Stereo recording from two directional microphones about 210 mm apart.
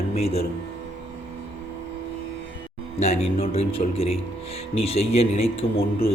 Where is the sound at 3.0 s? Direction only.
30° left (ahead or behind).